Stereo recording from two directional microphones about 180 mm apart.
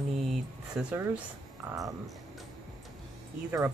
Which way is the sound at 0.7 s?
10° right (ahead or behind).